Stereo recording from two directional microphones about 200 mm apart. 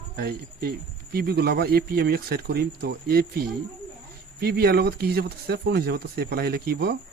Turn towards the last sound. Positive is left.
turn(degrees=-55)  # may be behind; listen again after turning